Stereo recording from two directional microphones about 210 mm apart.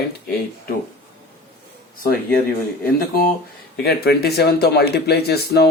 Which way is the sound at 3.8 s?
50° left (ahead or behind).